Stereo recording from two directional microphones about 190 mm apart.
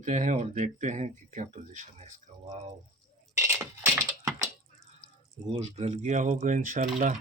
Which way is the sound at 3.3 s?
15° right (ahead or behind).